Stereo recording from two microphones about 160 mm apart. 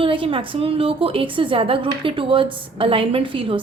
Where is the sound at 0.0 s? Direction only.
35° right (ahead or behind).